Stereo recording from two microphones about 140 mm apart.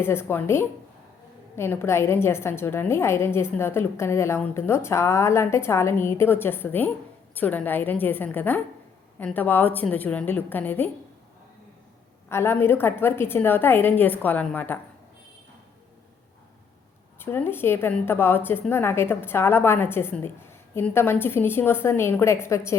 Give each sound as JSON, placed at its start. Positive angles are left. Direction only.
{"t": 0.0, "sound": "a woman's voice", "side_deg": 15}
{"t": 12.3, "sound": "a woman's voice", "side_deg": 15}
{"t": 17.2, "sound": "a woman's voice", "side_deg": 15}